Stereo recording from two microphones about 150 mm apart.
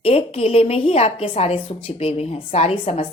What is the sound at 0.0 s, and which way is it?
A woman's voice, 40° left (ahead or behind).